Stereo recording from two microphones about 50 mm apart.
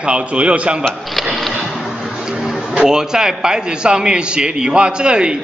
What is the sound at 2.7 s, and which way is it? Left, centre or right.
A man's voice, centre.